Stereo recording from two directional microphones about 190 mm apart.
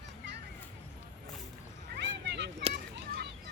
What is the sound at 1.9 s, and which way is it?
Cat, 65° right (ahead or behind).